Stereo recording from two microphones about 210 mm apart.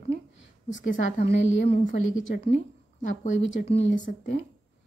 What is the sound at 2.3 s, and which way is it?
A woman's voice, 30° left (ahead or behind).